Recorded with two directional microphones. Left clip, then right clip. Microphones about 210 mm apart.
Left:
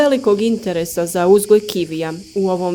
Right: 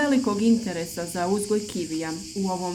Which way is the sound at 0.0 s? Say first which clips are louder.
Left 9 dB; 40° left (ahead or behind).